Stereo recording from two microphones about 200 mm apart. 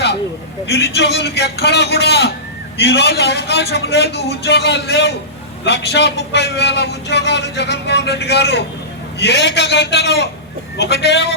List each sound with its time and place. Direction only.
0.6 s a man's voice: 60° left (ahead or behind)